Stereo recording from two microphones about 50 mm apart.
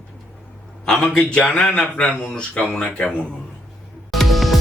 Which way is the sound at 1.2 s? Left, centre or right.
Left.